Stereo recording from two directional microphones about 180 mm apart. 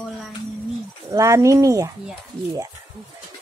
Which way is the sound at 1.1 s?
15° right (ahead or behind).